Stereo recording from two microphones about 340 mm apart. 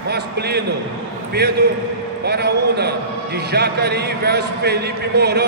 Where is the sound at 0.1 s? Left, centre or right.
Right.